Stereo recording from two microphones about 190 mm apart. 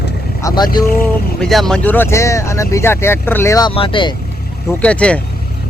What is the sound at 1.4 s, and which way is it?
Speech, centre (ahead or behind).